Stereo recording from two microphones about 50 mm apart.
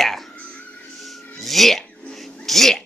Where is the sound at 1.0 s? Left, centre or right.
Centre.